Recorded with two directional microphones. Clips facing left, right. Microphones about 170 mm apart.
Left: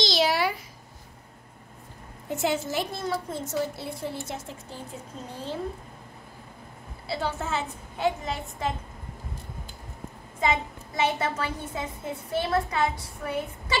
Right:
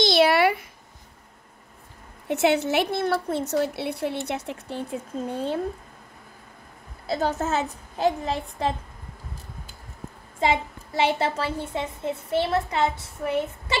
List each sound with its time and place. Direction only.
0.0 s a sound: 60° right (ahead or behind)
2.2 s a woman's voice: 70° right (ahead or behind)
7.1 s a woman's voice: 40° right (ahead or behind)
10.4 s a woman's voice: 30° right (ahead or behind)